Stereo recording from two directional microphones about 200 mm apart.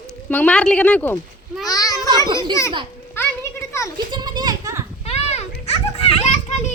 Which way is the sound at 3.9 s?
20° right (ahead or behind).